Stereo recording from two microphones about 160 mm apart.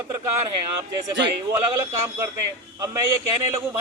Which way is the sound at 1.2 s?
20° right (ahead or behind).